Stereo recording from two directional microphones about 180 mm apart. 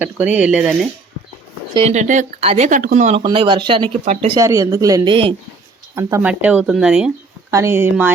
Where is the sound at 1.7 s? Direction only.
35° right (ahead or behind).